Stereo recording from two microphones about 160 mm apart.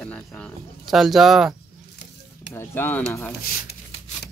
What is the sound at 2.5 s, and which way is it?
Speech, 15° left (ahead or behind).